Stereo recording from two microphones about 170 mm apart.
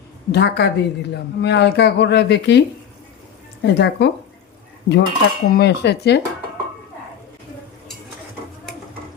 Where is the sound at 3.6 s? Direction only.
90° left.